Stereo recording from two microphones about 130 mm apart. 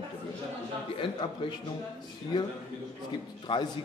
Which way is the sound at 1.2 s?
35° left (ahead or behind).